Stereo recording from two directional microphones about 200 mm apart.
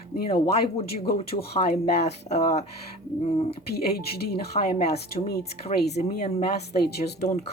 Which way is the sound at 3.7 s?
50° left (ahead or behind).